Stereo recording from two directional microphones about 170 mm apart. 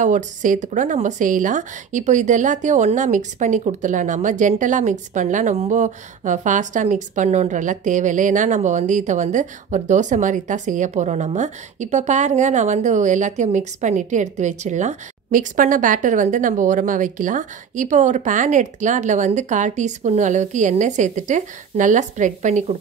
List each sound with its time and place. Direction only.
0.0 s a woman's voice: 50° right (ahead or behind)